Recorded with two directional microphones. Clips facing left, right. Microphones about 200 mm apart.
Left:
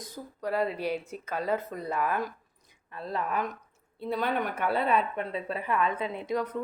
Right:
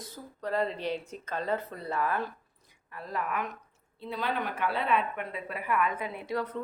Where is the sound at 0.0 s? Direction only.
10° left (ahead or behind).